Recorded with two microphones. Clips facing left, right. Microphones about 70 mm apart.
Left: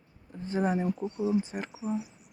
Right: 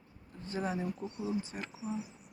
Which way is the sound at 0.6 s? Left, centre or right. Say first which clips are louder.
Left 7 dB; left.